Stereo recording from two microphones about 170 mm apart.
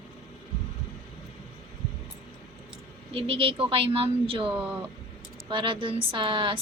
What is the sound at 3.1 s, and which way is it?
Speech, 35° right (ahead or behind).